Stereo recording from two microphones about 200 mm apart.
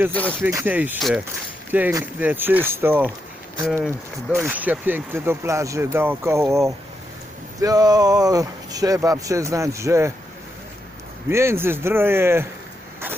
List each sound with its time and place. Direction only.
0.1 s speech: 5° left (ahead or behind)
0.4 s speech: 10° right (ahead or behind)
11.3 s speech: 15° right (ahead or behind)